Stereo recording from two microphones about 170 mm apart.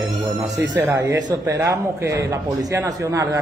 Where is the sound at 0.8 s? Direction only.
15° right (ahead or behind).